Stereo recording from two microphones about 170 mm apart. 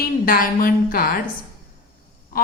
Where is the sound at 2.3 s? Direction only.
60° left (ahead or behind).